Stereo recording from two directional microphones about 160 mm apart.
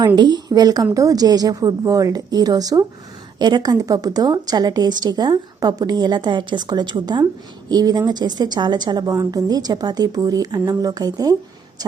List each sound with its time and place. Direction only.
0.2 s a woman's voice: 25° right (ahead or behind)